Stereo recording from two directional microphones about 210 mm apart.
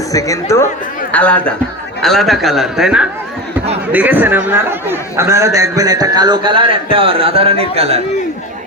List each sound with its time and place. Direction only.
0.1 s a man's voice: 15° left (ahead or behind); by 8.0 s 30° right (ahead or behind)